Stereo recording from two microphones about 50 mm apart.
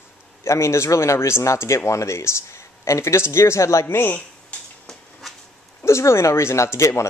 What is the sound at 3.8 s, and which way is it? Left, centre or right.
Speech, left.